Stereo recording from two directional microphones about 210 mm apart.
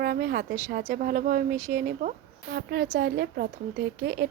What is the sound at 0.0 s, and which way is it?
Speech, 45° right (ahead or behind).